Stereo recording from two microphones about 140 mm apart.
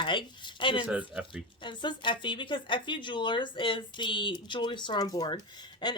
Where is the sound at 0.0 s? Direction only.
35° left (ahead or behind).